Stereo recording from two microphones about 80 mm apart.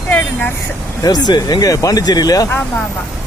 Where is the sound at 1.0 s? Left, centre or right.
Left.